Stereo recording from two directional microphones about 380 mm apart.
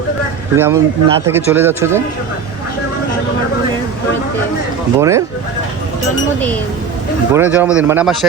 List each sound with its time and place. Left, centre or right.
0.5 s a man's voice: centre
4.9 s a man's voice: centre
7.3 s speech: centre